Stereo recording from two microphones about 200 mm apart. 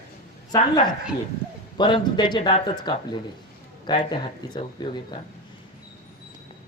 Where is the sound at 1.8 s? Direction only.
25° left (ahead or behind).